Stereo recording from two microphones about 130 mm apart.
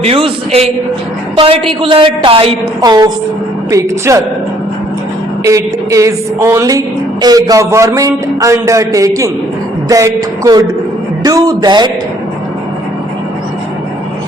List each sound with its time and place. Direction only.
0.0 s a woman's voice: 50° right (ahead or behind)
2.8 s a woman's voice: 30° right (ahead or behind)
5.4 s a woman's voice: 25° right (ahead or behind)